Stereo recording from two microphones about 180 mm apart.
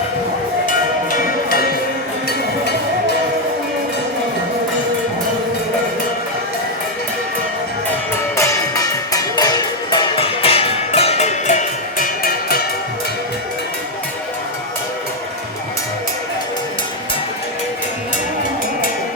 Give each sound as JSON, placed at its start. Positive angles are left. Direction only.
{"t": 1.1, "sound": "music", "side_deg": 55}
{"t": 8.4, "sound": "music", "side_deg": 15}